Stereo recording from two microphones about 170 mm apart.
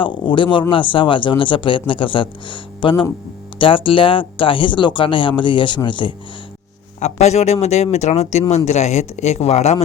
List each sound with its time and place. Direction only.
0.0 s speech: 30° left (ahead or behind)
7.0 s speech: 40° left (ahead or behind)